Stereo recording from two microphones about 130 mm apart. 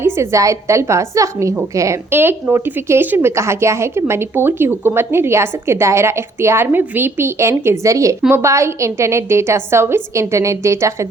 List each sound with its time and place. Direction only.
0.0 s speech: 20° right (ahead or behind)